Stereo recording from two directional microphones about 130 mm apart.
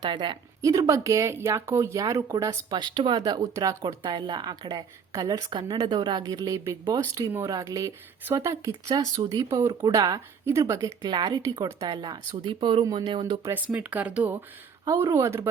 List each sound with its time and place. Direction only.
0.0 s speech: 40° right (ahead or behind)
0.6 s speech: 25° right (ahead or behind); by 12.8 s 45° right (ahead or behind)
12.8 s speech: 30° right (ahead or behind)
13.4 s speech: 15° right (ahead or behind)
14.8 s speech: 20° right (ahead or behind)